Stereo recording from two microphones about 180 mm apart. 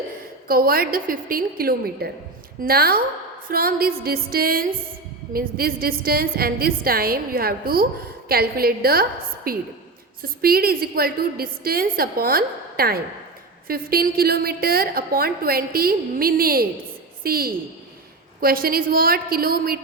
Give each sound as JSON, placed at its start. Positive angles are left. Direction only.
{"t": 0.4, "sound": "a woman's voice", "side_deg": -55}